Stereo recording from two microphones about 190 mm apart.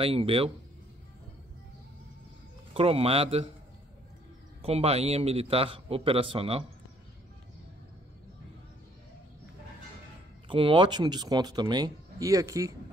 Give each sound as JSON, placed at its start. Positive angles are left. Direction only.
{"t": 0.0, "sound": "speech", "side_deg": -30}
{"t": 2.7, "sound": "a man's voice", "side_deg": -30}
{"t": 4.6, "sound": "a man's voice", "side_deg": -30}
{"t": 10.5, "sound": "speech", "side_deg": -25}